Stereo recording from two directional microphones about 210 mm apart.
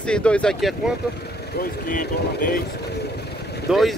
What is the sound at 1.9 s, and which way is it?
Speech, 40° left (ahead or behind).